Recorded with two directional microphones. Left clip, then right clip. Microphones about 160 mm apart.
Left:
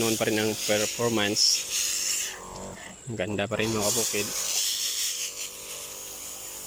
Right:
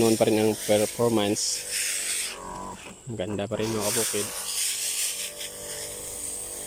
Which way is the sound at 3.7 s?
15° left (ahead or behind).